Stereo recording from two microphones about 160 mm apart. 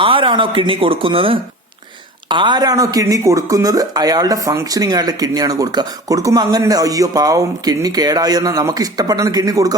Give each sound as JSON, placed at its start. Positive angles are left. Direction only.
{"t": 0.0, "sound": "speech", "side_deg": -35}